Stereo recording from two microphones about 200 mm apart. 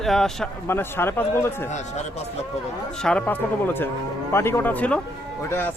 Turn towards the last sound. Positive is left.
turn(degrees=10)  # may be behind; listen again after turning